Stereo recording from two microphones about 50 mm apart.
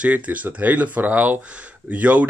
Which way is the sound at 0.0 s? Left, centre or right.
Right.